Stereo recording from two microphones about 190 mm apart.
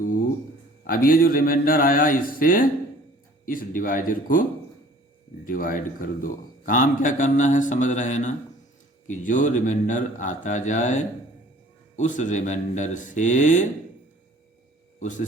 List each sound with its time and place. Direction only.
0.9 s speech: 50° left (ahead or behind)
5.5 s a man's voice: 45° left (ahead or behind)